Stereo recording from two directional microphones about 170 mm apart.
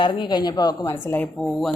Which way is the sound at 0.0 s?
30° left (ahead or behind).